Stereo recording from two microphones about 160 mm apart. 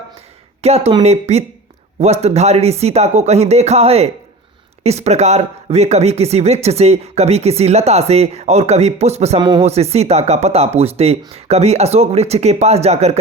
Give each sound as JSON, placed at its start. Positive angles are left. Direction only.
{"t": 0.6, "sound": "speech", "side_deg": -40}
{"t": 9.4, "sound": "speech", "side_deg": -30}
{"t": 9.6, "sound": "speech", "side_deg": -40}